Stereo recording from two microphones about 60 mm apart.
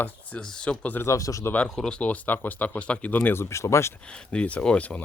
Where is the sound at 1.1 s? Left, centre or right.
Left.